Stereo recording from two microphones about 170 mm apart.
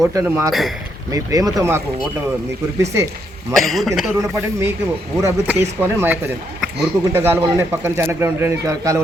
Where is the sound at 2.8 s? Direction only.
15° right (ahead or behind).